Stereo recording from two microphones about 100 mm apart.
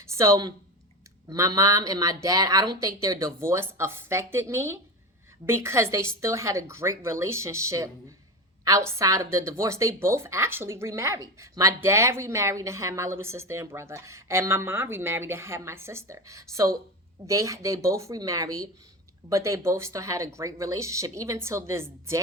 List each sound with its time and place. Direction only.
0.0 s speech: 30° right (ahead or behind)
9.0 s speech: 30° right (ahead or behind)